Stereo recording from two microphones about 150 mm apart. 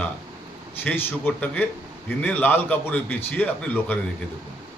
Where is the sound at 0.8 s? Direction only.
15° left (ahead or behind).